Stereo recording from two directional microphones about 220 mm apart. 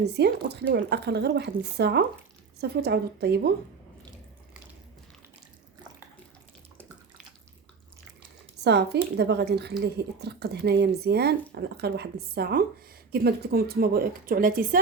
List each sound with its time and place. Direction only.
0.0 s speech: 50° right (ahead or behind)
8.6 s speech: 50° right (ahead or behind)